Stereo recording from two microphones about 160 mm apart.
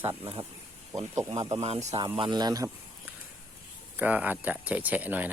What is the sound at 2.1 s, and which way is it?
Speech, 30° right (ahead or behind).